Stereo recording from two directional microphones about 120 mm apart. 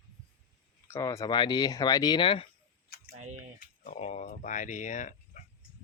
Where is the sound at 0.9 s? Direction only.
25° left (ahead or behind); by 2.4 s 45° left (ahead or behind).